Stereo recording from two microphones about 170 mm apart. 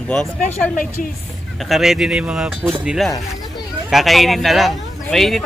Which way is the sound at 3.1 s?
20° left (ahead or behind).